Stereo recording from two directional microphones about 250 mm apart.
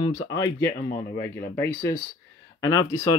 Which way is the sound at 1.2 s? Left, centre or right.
Left.